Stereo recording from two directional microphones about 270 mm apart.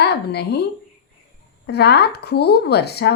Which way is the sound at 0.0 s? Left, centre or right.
Left.